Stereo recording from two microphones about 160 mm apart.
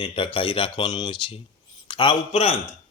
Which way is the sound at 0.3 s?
35° left (ahead or behind).